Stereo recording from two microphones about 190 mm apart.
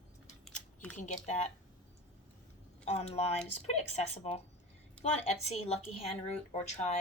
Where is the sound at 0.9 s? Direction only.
40° left (ahead or behind).